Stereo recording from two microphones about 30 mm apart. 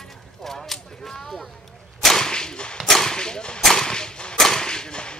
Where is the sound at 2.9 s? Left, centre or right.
Centre.